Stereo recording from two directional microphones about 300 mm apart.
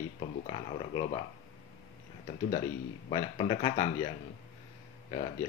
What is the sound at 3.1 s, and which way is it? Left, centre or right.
Speech, centre.